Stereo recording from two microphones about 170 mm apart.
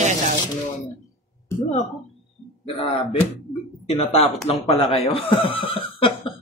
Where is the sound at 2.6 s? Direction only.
35° left (ahead or behind).